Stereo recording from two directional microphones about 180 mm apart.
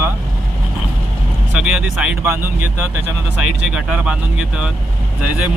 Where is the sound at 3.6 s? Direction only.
5° right (ahead or behind).